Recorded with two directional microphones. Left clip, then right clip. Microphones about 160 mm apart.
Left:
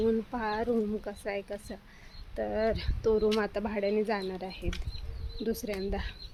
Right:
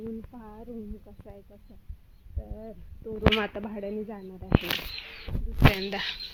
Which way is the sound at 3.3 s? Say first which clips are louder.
Right 1 dB; 15° left (ahead or behind).